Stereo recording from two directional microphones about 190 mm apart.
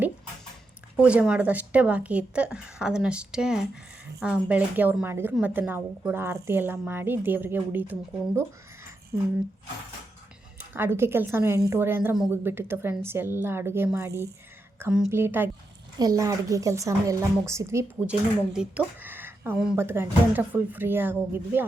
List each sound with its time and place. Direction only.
0.9 s a woman's voice: 5° right (ahead or behind)
9.1 s a woman's voice: 10° right (ahead or behind)
10.8 s a woman's voice: 15° right (ahead or behind)